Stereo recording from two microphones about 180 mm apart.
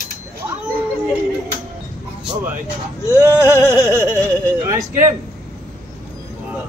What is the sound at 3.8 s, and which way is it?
Speech, 15° right (ahead or behind).